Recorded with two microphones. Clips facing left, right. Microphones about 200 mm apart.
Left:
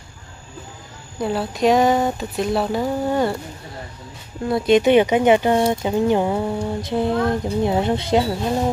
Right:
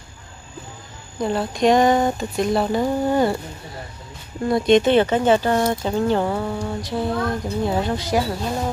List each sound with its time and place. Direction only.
1.1 s speech: 5° left (ahead or behind)
4.5 s a woman's voice: 5° left (ahead or behind); by 8.3 s 25° left (ahead or behind)